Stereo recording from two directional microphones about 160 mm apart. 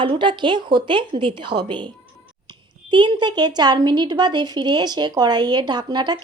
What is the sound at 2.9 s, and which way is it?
Speech, 30° right (ahead or behind).